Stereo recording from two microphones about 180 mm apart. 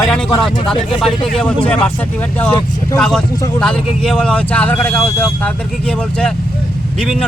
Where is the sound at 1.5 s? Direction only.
25° left (ahead or behind).